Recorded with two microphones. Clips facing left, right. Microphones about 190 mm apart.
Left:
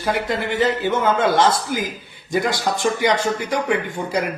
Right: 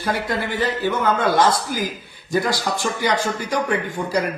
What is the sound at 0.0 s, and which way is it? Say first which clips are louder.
A man's voice: left 1 dB; 20° left (ahead or behind).